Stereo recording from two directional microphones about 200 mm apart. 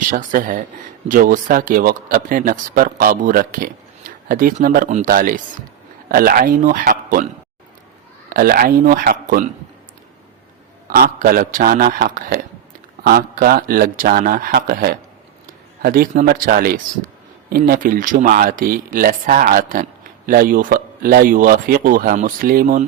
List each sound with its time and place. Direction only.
0.1 s speech: 40° right (ahead or behind)
8.3 s speech: 45° right (ahead or behind)
10.8 s speech: 45° right (ahead or behind)